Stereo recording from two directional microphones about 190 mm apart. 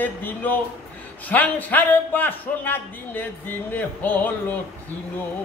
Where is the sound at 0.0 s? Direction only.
10° left (ahead or behind).